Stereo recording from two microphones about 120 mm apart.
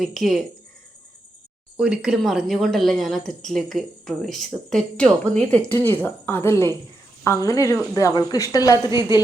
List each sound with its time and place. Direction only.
0.0 s speech: centre (ahead or behind)
1.7 s a woman's voice: 5° right (ahead or behind); by 9.2 s 35° left (ahead or behind)